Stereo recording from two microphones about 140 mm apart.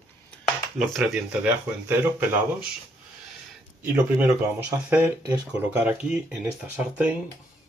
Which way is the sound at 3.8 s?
15° right (ahead or behind).